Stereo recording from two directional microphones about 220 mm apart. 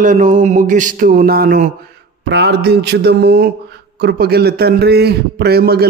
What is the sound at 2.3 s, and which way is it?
A man's voice, 50° right (ahead or behind).